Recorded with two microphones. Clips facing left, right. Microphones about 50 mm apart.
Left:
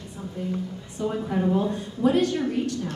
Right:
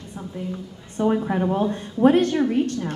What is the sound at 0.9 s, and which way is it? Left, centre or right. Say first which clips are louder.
Speech: right 5 dB; right.